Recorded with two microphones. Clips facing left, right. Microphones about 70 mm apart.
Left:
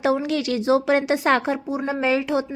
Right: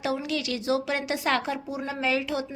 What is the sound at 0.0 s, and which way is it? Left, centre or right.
A woman's voice, left.